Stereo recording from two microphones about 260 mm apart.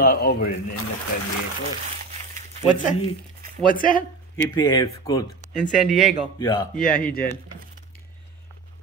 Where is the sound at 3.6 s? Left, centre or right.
Left.